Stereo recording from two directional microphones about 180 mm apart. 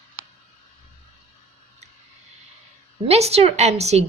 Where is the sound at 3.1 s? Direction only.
35° right (ahead or behind).